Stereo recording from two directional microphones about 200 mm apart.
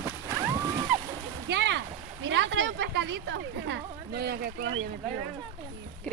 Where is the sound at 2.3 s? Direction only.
65° right (ahead or behind).